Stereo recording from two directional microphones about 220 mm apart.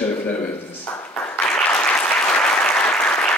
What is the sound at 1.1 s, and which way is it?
Applause, 5° left (ahead or behind).